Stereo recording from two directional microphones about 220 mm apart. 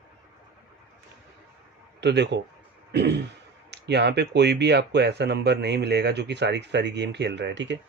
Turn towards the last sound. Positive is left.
turn(degrees=-55)  # may be behind; listen again after turning